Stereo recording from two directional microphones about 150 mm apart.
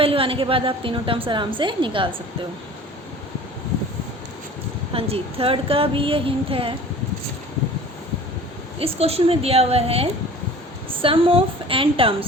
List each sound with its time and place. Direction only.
0.0 s a woman's voice: 40° right (ahead or behind)
4.9 s a woman's voice: 40° right (ahead or behind)
8.8 s a woman's voice: 40° right (ahead or behind)